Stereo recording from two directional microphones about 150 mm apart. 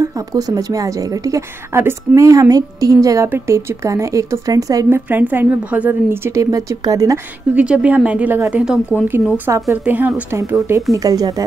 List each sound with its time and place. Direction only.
0.0 s a woman's voice: 25° right (ahead or behind)
7.5 s speech: 10° right (ahead or behind)
10.7 s a woman's voice: 20° right (ahead or behind)